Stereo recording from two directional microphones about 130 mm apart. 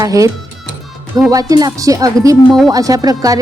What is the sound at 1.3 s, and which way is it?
Speech, 30° right (ahead or behind).